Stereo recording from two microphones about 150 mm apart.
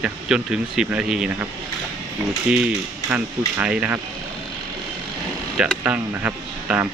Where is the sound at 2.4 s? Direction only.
10° right (ahead or behind).